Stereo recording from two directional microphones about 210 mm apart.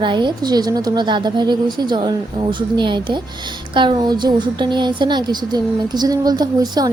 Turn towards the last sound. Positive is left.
turn(degrees=-20)  # may be behind; listen again after turning